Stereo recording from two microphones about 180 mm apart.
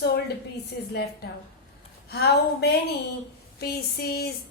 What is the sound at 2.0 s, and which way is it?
A woman's voice, 65° left (ahead or behind).